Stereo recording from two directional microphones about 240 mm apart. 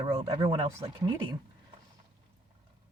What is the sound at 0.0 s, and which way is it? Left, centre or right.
Speech, right.